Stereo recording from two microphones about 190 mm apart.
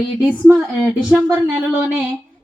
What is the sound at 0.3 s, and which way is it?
A woman's voice, 5° right (ahead or behind).